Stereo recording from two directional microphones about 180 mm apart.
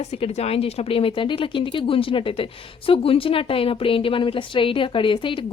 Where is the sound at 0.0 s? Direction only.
35° left (ahead or behind).